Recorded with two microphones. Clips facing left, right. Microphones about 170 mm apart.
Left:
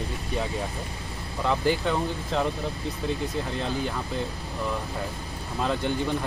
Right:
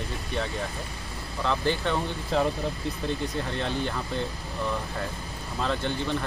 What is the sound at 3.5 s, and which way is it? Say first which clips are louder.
Speech: even; 5° left (ahead or behind).